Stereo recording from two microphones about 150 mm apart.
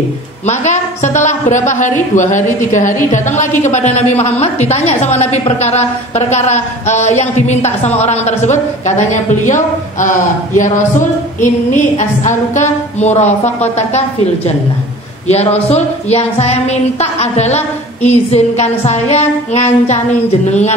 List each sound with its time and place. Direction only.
0.5 s a woman's voice: 50° left (ahead or behind)